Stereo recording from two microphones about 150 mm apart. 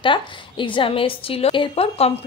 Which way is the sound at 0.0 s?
35° left (ahead or behind).